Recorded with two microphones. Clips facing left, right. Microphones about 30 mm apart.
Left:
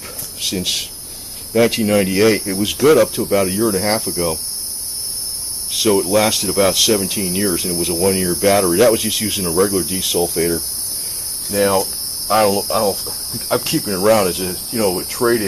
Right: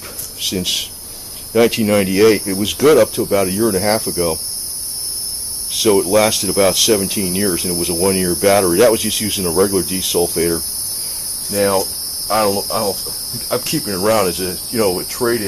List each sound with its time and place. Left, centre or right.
0.4 s speech: centre
5.7 s speech: centre